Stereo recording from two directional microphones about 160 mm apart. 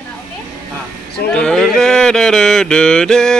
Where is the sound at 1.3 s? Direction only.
5° left (ahead or behind).